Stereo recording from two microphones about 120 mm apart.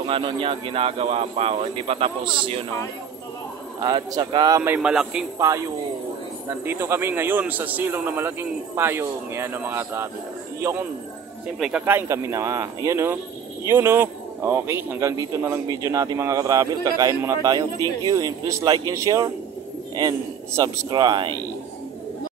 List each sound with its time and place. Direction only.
0.0 s speech: 45° right (ahead or behind)
3.8 s a man's voice: 40° right (ahead or behind)
4.6 s a man's voice: 15° right (ahead or behind)
5.4 s a man's voice: 25° right (ahead or behind)
11.8 s a man's voice: 20° right (ahead or behind); by 21.4 s 40° right (ahead or behind)